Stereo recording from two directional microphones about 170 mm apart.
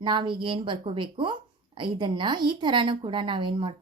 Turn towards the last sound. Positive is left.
turn(degrees=-30)  # may be behind; listen again after turning